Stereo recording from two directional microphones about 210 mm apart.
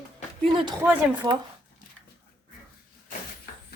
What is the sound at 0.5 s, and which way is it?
Speech, 20° right (ahead or behind).